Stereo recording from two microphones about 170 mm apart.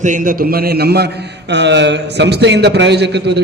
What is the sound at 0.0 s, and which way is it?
A man's voice, 50° right (ahead or behind).